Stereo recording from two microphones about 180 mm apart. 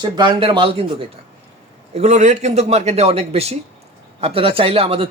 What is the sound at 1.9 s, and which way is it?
A man's voice, 40° right (ahead or behind).